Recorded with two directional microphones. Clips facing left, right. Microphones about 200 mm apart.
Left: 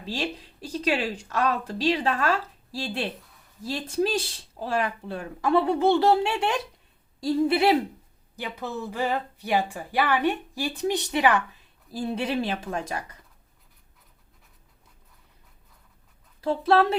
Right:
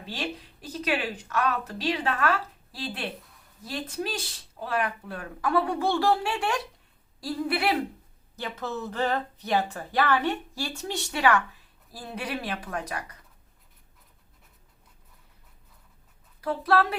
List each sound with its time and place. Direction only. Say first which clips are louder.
0.6 s speech: left 3 dB; 30° left (ahead or behind)
8.4 s speech: even; 15° left (ahead or behind)
16.4 s speech: left 3 dB; 25° left (ahead or behind)